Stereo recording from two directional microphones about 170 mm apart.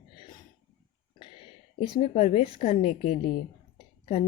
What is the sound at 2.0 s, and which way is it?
A woman's voice, 40° left (ahead or behind).